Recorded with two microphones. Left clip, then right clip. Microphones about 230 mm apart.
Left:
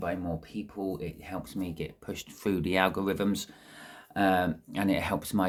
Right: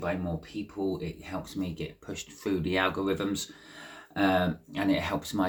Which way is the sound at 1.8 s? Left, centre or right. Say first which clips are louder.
Even; left.